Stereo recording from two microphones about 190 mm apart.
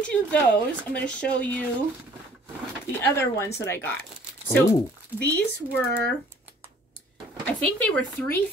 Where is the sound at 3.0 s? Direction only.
15° left (ahead or behind).